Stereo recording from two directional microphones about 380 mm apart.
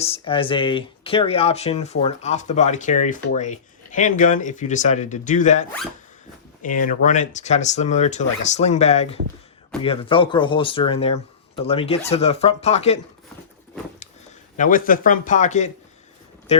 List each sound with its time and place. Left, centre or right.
0.0 s speech: centre
14.5 s a man's voice: left